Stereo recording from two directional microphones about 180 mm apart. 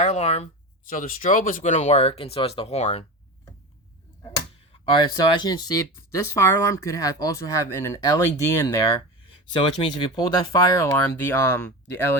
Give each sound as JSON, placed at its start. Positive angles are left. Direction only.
{"t": 0.0, "sound": "speech", "side_deg": 40}
{"t": 0.9, "sound": "speech", "side_deg": 50}
{"t": 5.3, "sound": "speech", "side_deg": 25}